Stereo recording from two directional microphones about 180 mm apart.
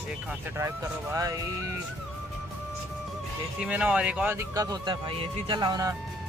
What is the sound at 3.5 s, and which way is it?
Speech, 5° right (ahead or behind).